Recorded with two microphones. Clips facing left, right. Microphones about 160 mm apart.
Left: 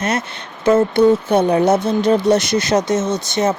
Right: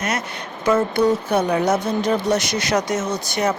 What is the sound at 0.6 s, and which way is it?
Speech, 25° left (ahead or behind).